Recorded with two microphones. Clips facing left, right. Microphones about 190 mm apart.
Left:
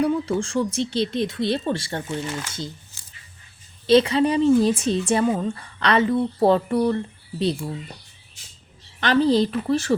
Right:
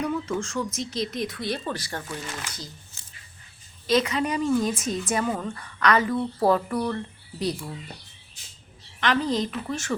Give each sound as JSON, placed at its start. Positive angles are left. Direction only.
{"t": 0.0, "sound": "speech", "side_deg": 30}
{"t": 3.8, "sound": "a woman's voice", "side_deg": 30}
{"t": 9.0, "sound": "a woman's voice", "side_deg": 35}